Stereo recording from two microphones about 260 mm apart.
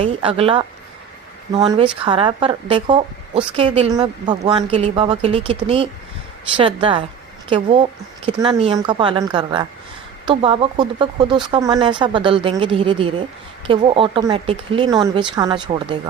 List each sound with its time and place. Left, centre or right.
0.0 s a woman's voice: right